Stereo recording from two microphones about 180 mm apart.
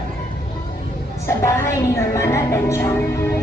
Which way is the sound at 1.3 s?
15° left (ahead or behind).